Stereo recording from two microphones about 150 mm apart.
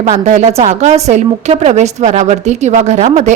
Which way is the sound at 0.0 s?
50° right (ahead or behind).